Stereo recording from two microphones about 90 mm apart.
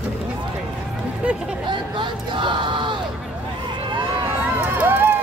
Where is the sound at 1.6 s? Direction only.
65° right (ahead or behind).